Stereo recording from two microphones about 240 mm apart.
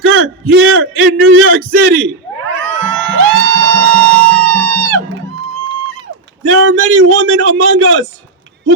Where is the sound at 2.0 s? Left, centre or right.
Right.